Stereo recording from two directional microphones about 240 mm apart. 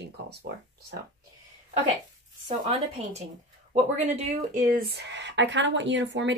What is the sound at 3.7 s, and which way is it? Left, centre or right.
Speech, right.